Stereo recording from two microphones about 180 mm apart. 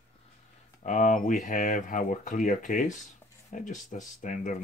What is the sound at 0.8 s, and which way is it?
Speech, 45° left (ahead or behind).